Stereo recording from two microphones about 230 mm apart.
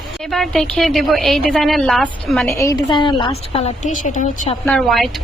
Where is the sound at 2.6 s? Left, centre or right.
Centre.